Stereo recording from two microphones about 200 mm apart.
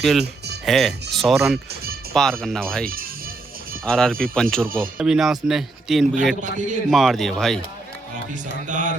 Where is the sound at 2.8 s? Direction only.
45° right (ahead or behind).